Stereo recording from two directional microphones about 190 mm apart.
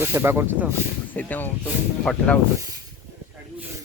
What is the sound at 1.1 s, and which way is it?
Speech, 10° left (ahead or behind).